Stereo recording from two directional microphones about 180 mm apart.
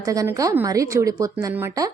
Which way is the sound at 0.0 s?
20° right (ahead or behind).